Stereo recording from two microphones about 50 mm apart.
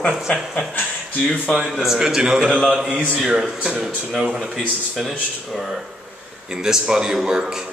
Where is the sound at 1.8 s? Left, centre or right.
Centre.